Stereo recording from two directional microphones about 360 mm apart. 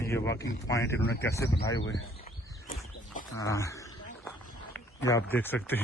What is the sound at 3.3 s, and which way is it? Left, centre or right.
Speech, centre.